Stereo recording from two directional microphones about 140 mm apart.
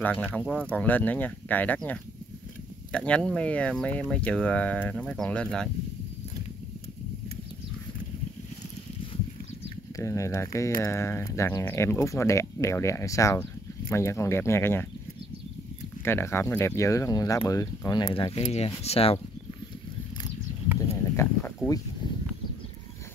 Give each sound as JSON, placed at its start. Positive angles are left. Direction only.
{"t": 0.0, "sound": "speech", "side_deg": 10}
{"t": 9.9, "sound": "speech", "side_deg": 20}
{"t": 16.0, "sound": "speech", "side_deg": 15}
{"t": 21.2, "sound": "a sound", "side_deg": 15}